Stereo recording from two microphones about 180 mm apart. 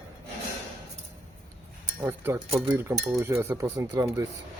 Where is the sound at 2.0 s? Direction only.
10° right (ahead or behind).